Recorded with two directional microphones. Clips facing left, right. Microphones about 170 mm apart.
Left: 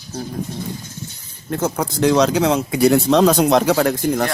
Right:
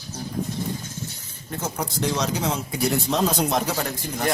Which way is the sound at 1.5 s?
90° left.